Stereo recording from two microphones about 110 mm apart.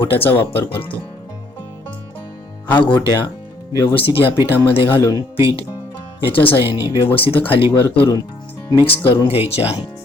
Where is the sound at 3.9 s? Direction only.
55° left (ahead or behind).